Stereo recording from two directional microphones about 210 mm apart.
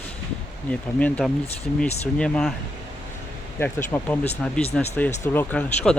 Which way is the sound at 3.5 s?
10° left (ahead or behind).